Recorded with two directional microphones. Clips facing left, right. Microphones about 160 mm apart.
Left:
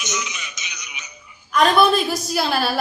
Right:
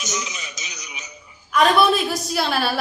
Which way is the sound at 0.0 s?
40° right (ahead or behind).